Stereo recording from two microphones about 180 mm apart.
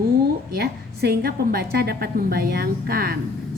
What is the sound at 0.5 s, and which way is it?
A woman's voice, 60° right (ahead or behind).